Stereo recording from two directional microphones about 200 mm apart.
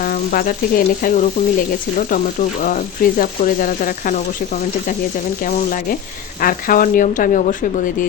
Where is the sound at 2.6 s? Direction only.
45° left (ahead or behind).